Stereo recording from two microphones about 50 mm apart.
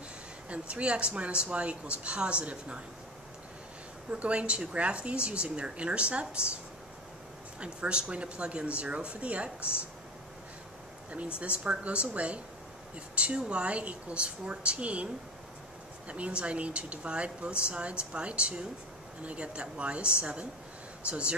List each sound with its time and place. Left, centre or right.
0.5 s speech: right
4.1 s speech: right
7.6 s speech: right
11.3 s speech: right
16.1 s speech: right